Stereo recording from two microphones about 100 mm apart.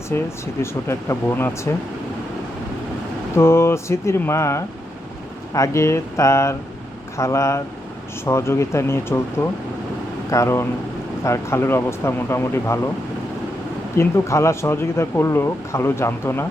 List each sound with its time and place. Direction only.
0.1 s speech: 25° left (ahead or behind)
3.3 s speech: 25° left (ahead or behind)
13.9 s speech: 30° left (ahead or behind)